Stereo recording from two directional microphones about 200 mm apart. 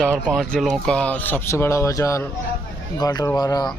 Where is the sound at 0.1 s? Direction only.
Centre (ahead or behind).